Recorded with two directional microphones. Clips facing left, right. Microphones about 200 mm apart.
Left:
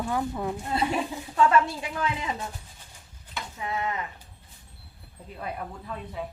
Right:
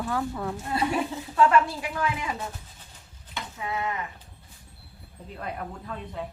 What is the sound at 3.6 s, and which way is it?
Speech, 20° left (ahead or behind).